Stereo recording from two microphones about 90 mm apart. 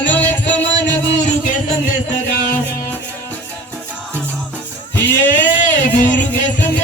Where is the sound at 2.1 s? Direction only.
20° left (ahead or behind).